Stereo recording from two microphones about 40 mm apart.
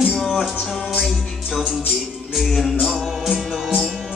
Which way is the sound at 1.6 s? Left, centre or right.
Centre.